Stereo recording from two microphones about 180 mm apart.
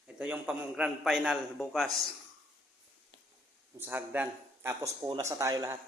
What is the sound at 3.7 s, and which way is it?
Speech, 10° right (ahead or behind).